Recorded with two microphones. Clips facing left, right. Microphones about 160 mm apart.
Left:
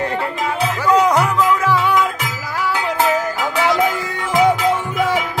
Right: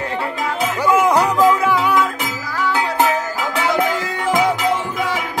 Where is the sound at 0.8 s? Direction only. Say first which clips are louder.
Even; 20° right (ahead or behind).